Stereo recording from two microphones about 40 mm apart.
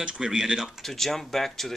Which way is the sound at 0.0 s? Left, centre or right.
Right.